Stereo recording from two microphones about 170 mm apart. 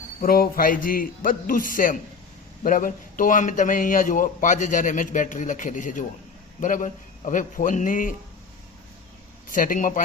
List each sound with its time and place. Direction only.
0.2 s a man's voice: 60° left (ahead or behind)
9.5 s a man's voice: 50° left (ahead or behind)